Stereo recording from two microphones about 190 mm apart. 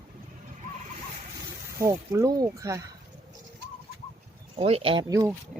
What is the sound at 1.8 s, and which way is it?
Speech, 15° right (ahead or behind).